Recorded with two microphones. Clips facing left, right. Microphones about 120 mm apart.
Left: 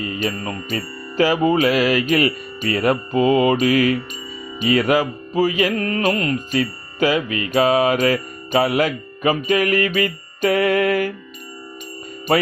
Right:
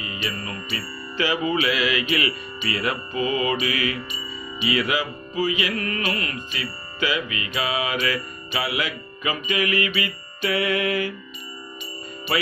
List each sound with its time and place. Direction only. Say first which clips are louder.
0.0 s music: left 7 dB; 45° left (ahead or behind)
12.3 s music: left 7 dB; 40° left (ahead or behind)